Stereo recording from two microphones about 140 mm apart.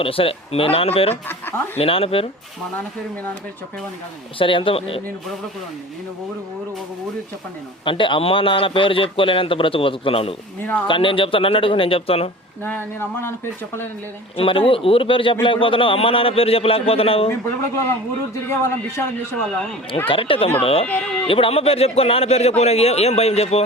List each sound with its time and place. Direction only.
0.0 s a man's voice: 40° left (ahead or behind)
1.1 s speech: 15° left (ahead or behind)
1.8 s a man's voice: 40° left (ahead or behind)
4.4 s a man's voice: 40° left (ahead or behind)
7.9 s a man's voice: 35° left (ahead or behind)
10.6 s a man's voice: 15° left (ahead or behind)
10.8 s a man's voice: 35° left (ahead or behind)
12.6 s a man's voice: 15° left (ahead or behind)
14.3 s a man's voice: 40° left (ahead or behind)
18.4 s a man's voice: 20° left (ahead or behind)
20.1 s a man's voice: 40° left (ahead or behind)
20.8 s a man's voice: 10° left (ahead or behind)
21.2 s a man's voice: 40° left (ahead or behind)